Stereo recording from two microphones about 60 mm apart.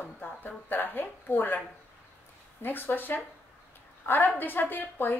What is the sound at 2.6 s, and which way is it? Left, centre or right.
Speech, left.